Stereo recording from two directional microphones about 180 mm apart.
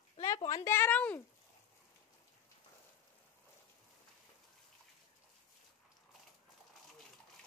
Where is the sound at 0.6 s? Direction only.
10° left (ahead or behind).